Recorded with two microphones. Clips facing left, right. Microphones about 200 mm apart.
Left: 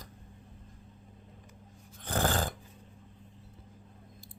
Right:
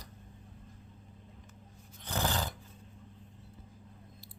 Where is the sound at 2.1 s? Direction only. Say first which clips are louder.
Left 4 dB; 50° left (ahead or behind).